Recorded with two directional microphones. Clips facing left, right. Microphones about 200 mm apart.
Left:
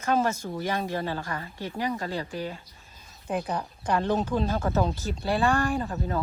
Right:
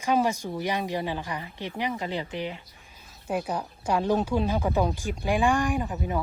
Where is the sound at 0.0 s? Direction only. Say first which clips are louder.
Right 1 dB; 15° right (ahead or behind).